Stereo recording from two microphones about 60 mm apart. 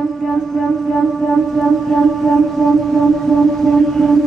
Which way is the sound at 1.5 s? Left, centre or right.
Centre.